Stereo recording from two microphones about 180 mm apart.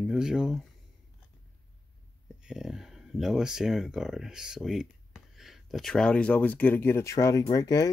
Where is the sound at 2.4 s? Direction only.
5° right (ahead or behind).